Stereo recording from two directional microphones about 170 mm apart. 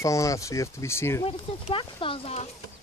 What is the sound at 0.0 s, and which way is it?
Speech, 20° left (ahead or behind).